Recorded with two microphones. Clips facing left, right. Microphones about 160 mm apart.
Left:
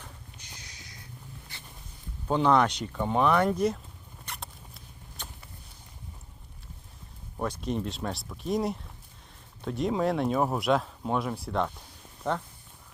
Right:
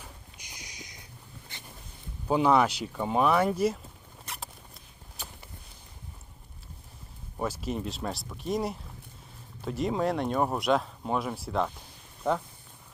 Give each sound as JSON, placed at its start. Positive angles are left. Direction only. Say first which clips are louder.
{"t": 0.0, "sound": "a sound", "louder": "even", "side_deg": -15}
{"t": 1.5, "sound": "boat", "louder": "right 1 dB", "side_deg": -20}
{"t": 2.2, "sound": "speech", "louder": "even", "side_deg": -5}
{"t": 4.3, "sound": "rodents", "louder": "even", "side_deg": 0}
{"t": 7.3, "sound": "speech", "louder": "left 1 dB", "side_deg": -5}